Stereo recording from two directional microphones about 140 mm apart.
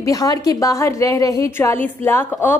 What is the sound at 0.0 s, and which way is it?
A woman's voice, 25° left (ahead or behind).